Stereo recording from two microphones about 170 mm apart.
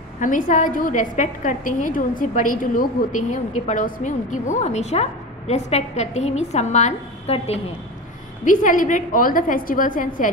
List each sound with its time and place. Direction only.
0.2 s a woman's voice: 50° left (ahead or behind)
8.5 s a woman's voice: 50° left (ahead or behind)